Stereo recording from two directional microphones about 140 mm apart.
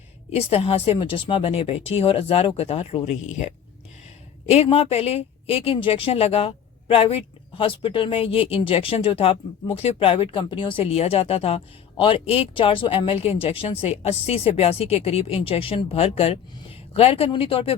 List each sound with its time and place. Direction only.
0.3 s a woman's voice: 45° left (ahead or behind)